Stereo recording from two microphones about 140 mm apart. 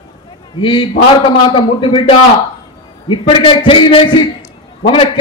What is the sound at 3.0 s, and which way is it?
A man's voice, 35° left (ahead or behind).